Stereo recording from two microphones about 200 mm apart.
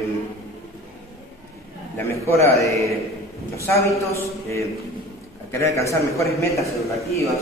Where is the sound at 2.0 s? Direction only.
10° left (ahead or behind).